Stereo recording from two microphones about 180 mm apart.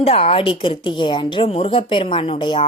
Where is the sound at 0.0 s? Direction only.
35° left (ahead or behind).